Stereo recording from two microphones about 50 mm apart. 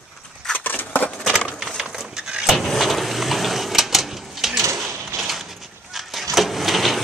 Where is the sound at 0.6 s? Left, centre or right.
Left.